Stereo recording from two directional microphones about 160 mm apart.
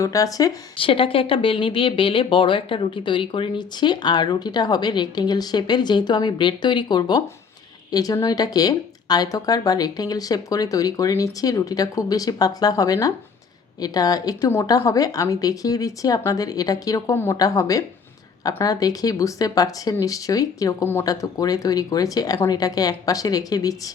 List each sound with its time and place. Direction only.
0.0 s speech: 20° left (ahead or behind)
0.8 s speech: 35° left (ahead or behind)